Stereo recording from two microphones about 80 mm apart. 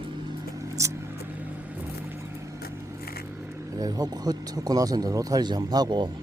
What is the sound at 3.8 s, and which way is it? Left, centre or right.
Speech, right.